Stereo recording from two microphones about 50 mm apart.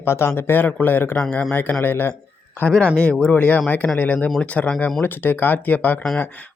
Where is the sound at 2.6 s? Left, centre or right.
Left.